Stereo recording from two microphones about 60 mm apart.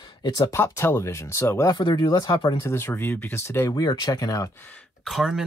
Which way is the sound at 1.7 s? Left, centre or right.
Left.